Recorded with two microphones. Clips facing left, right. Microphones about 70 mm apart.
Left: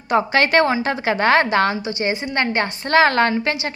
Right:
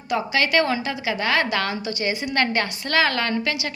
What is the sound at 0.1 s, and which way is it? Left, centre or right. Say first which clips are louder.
A woman's voice: left 5 dB; left.